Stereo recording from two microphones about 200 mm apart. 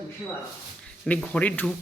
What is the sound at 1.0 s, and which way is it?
Speech, 5° left (ahead or behind).